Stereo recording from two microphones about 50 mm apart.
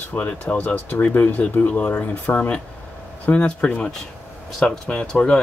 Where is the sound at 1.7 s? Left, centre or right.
Left.